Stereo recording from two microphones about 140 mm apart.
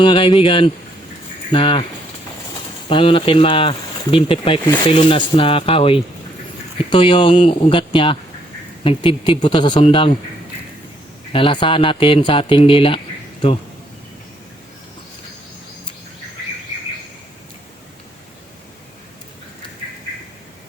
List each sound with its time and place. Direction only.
0.0 s speech: 40° left (ahead or behind)
2.9 s speech: 40° left (ahead or behind)
11.3 s speech: 40° left (ahead or behind)